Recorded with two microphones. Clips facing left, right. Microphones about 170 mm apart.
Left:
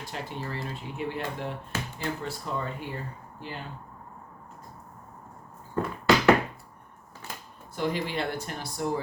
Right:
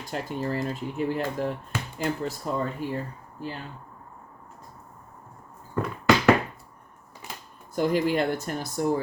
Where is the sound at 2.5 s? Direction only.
45° right (ahead or behind).